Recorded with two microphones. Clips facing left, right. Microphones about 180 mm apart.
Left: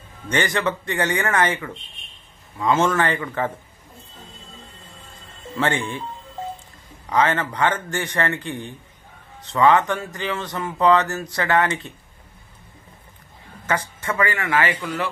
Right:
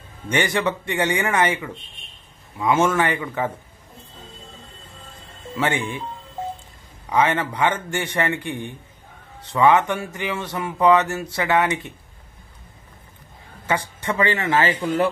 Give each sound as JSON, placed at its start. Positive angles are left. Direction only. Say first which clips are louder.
{"t": 0.3, "sound": "speech", "louder": "right 1 dB", "side_deg": -15}
{"t": 5.6, "sound": "speech", "louder": "even", "side_deg": -10}
{"t": 7.1, "sound": "speech", "louder": "even", "side_deg": -10}
{"t": 13.7, "sound": "speech", "louder": "right 1 dB", "side_deg": -15}